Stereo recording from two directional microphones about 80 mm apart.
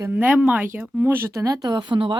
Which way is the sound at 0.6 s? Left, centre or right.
Right.